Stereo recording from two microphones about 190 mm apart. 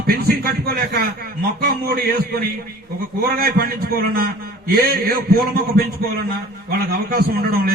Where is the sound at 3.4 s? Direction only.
50° right (ahead or behind).